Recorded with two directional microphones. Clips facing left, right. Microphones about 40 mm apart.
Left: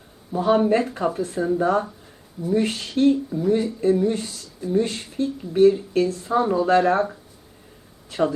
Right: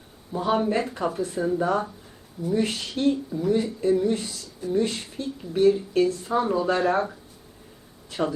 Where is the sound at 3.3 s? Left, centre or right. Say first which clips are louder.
Left 3 dB; centre.